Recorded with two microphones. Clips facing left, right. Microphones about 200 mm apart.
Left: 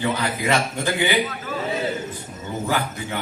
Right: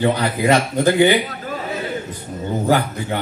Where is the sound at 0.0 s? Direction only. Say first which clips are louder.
Right 6 dB; 40° right (ahead or behind).